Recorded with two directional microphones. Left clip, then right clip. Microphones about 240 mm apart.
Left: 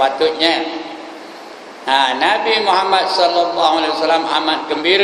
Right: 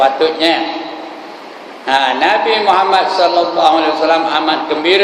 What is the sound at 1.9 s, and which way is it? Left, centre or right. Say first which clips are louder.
A man's voice: right 2 dB; centre.